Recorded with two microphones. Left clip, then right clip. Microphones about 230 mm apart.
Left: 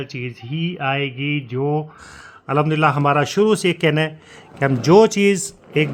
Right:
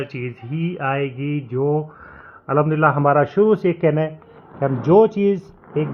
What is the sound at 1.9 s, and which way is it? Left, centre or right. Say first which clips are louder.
Speech: left 1 dB; left.